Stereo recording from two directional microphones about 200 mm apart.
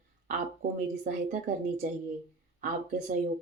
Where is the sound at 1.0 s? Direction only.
40° right (ahead or behind).